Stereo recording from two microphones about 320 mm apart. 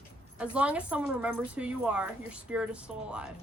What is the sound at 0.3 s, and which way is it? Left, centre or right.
A woman's voice, centre.